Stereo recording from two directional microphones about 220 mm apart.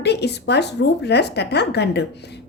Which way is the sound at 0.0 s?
50° left (ahead or behind).